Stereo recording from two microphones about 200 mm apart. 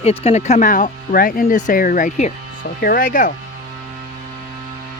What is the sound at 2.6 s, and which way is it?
Speech, 55° left (ahead or behind).